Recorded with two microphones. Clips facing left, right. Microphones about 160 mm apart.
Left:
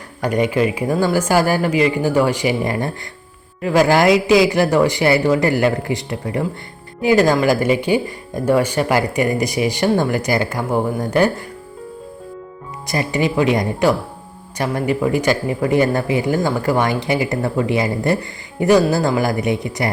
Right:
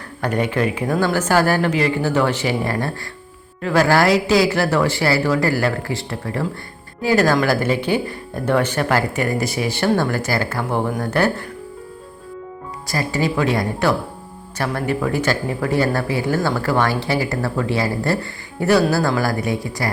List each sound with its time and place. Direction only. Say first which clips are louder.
0.2 s speech: left 3 dB; 10° left (ahead or behind)
12.9 s speech: left 2 dB; 20° left (ahead or behind)